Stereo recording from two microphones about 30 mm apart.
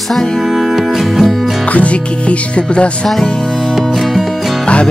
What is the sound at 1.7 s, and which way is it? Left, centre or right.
Music, left.